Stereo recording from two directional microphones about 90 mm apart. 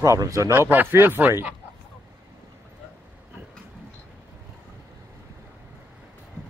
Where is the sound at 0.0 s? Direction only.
35° right (ahead or behind); by 1.5 s 20° right (ahead or behind).